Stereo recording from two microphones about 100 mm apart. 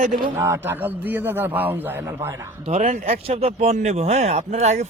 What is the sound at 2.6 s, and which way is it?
Speech, 85° right.